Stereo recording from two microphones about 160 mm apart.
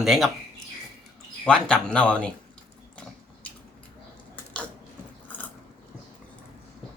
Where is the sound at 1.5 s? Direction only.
5° left (ahead or behind).